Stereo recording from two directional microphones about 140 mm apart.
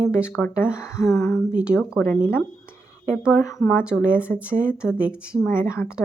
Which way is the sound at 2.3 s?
15° left (ahead or behind).